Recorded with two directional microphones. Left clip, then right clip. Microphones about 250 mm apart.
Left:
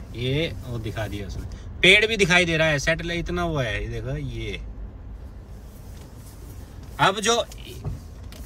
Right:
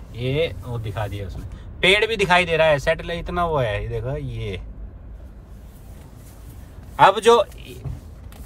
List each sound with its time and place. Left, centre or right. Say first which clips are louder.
0.1 s a man's voice: right 3 dB; centre
7.0 s a man's voice: right 7 dB; centre